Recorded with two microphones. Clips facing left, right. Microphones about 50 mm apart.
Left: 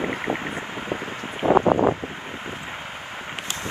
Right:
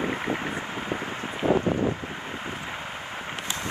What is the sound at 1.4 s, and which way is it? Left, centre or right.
Wind, left.